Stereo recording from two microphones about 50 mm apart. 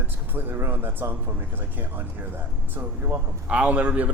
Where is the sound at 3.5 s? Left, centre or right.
Right.